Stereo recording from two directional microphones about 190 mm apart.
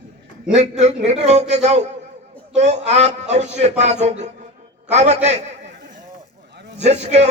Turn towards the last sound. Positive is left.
turn(degrees=-35)  # may be behind; listen again after turning